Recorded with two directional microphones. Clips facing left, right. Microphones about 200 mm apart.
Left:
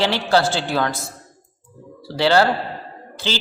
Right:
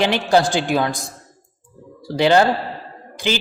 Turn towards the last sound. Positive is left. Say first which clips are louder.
# right 4 dB
turn(degrees=-15)  # may be behind; listen again after turning